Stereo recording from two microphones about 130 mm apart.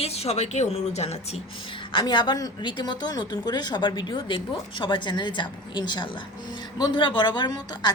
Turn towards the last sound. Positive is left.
turn(degrees=30)  # may be behind; listen again after turning